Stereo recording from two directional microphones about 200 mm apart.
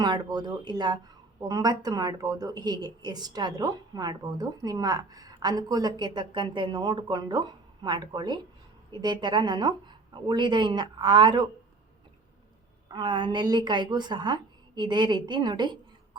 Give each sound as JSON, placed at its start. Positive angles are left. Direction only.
{"t": 0.0, "sound": "a woman's voice", "side_deg": -20}
{"t": 12.9, "sound": "a woman's voice", "side_deg": -25}